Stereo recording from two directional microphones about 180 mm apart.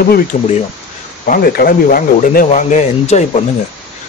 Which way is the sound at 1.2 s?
55° left (ahead or behind).